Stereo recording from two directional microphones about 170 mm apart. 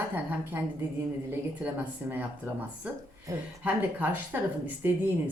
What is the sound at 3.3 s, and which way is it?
A woman's voice, 10° right (ahead or behind).